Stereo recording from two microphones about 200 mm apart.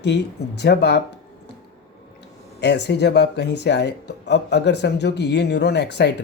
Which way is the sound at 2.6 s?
60° left (ahead or behind).